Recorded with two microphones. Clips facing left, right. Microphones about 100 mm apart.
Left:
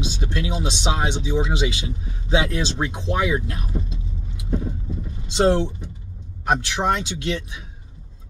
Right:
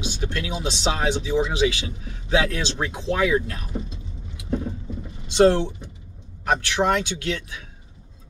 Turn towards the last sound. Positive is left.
turn(degrees=20)  # may be behind; listen again after turning